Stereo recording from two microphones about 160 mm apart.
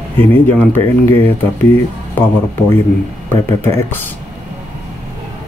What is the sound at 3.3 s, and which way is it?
Speech, 15° left (ahead or behind).